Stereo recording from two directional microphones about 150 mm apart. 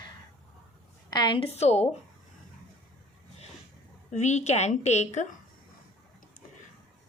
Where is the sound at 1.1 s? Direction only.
30° left (ahead or behind); by 1.8 s 45° left (ahead or behind).